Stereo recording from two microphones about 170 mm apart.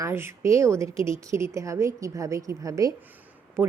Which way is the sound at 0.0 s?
15° right (ahead or behind).